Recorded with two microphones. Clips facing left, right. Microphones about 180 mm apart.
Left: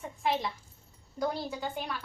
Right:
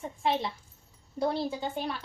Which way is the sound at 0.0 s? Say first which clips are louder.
Right 2 dB; 30° right (ahead or behind).